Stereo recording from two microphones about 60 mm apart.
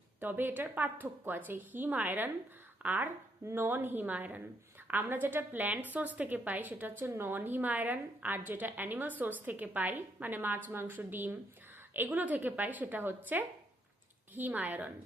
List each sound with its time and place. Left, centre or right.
0.2 s a woman's voice: right
3.4 s a woman's voice: right